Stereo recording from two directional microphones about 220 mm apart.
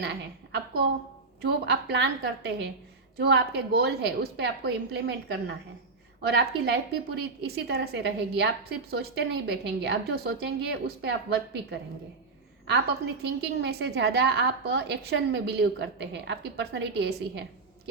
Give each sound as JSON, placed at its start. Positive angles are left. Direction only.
{"t": 0.0, "sound": "a woman's voice", "side_deg": -50}
{"t": 13.2, "sound": "a woman's voice", "side_deg": -50}